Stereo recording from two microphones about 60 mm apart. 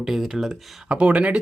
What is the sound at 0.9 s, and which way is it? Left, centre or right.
Speech, centre.